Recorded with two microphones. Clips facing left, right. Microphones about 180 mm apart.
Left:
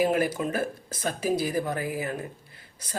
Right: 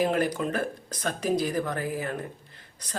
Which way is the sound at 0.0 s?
10° left (ahead or behind).